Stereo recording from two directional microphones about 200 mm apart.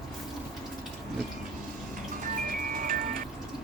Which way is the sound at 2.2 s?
45° right (ahead or behind).